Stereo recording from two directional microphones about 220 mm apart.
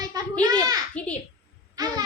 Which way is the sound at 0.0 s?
15° right (ahead or behind).